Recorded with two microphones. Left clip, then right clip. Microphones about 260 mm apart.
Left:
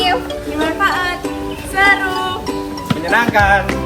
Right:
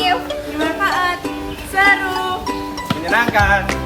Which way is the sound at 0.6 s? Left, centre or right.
Centre.